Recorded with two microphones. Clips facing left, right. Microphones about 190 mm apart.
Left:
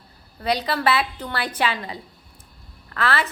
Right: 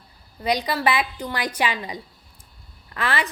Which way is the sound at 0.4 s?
10° right (ahead or behind).